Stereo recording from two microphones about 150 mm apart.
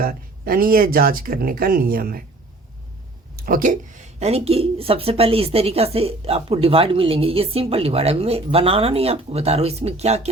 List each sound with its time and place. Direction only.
0.0 s speech: 80° right
3.4 s speech: 65° right (ahead or behind)
4.2 s a woman's voice: 45° right (ahead or behind)